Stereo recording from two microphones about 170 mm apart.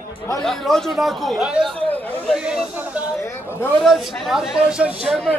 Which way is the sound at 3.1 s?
15° left (ahead or behind).